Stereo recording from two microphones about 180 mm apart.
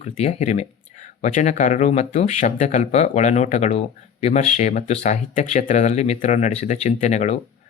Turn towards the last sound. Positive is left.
turn(degrees=40)  # may be behind; listen again after turning